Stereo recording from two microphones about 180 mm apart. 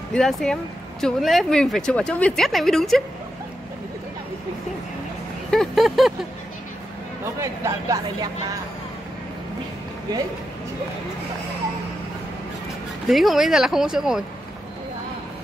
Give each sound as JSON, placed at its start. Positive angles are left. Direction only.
{"t": 0.1, "sound": "speech", "side_deg": 0}
{"t": 5.5, "sound": "speech", "side_deg": 0}
{"t": 7.3, "sound": "speech", "side_deg": -15}
{"t": 13.1, "sound": "speech", "side_deg": 0}